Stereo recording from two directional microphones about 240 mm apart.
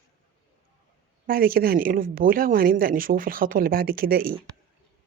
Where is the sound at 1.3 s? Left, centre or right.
Right.